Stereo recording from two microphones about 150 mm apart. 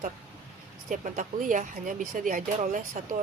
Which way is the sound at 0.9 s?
60° right (ahead or behind).